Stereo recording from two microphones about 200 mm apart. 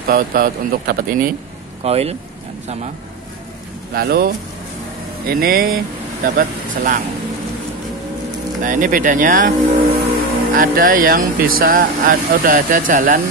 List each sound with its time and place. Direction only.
0.1 s speech: 45° right (ahead or behind)
1.8 s speech: 30° right (ahead or behind)
3.9 s speech: 50° right (ahead or behind)
8.6 s speech: 40° right (ahead or behind)